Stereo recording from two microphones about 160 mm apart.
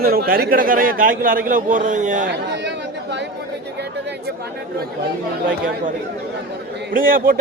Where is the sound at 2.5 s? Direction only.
90° right.